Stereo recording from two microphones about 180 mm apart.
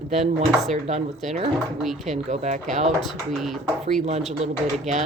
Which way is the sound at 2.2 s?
40° right (ahead or behind).